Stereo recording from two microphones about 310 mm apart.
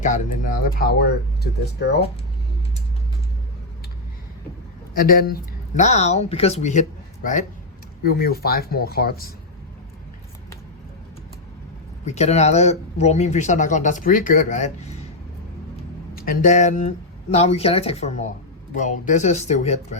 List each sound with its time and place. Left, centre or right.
0.0 s speech: left
4.9 s speech: left
8.0 s speech: left
12.0 s speech: left
16.1 s speech: left